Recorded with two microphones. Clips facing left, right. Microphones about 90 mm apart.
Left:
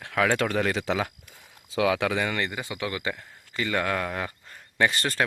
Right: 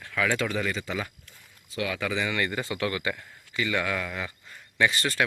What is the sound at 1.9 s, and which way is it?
Speech, 65° left (ahead or behind).